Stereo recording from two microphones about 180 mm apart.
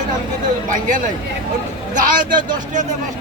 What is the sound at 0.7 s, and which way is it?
Speech, 45° right (ahead or behind).